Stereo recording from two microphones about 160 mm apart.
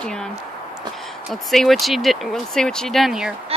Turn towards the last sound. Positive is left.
turn(degrees=0)  # may be behind; listen again after turning